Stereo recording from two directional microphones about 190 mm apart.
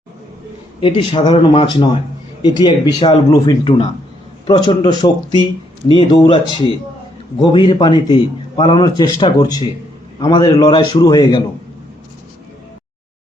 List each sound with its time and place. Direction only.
0.8 s a man's voice: 25° left (ahead or behind)